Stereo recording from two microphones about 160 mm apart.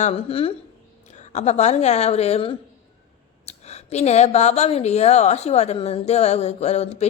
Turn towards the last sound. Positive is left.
turn(degrees=45)  # may be behind; listen again after turning